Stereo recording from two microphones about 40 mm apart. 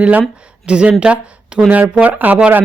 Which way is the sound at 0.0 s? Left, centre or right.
Right.